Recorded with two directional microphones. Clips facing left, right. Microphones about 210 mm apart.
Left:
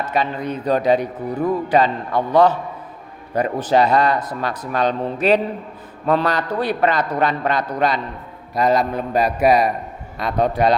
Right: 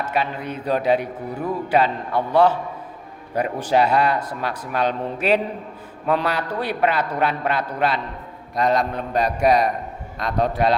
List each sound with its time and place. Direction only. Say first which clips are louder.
0.0 s a man's voice: left 3 dB; 10° right (ahead or behind)